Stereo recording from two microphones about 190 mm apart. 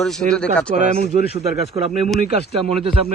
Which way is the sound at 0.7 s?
40° right (ahead or behind).